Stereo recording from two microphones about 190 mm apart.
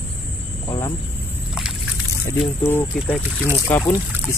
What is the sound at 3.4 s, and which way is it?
Speech, 10° left (ahead or behind).